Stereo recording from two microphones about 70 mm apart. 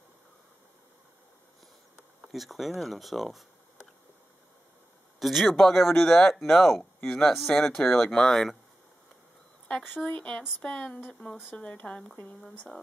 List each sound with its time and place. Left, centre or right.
2.2 s speech: centre
5.2 s speech: centre
9.7 s speech: centre
12.0 s speech: centre